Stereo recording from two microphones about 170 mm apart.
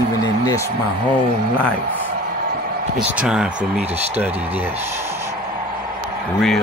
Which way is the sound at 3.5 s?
40° right (ahead or behind).